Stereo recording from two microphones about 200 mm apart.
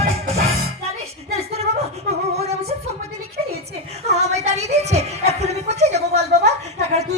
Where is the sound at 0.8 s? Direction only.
30° right (ahead or behind).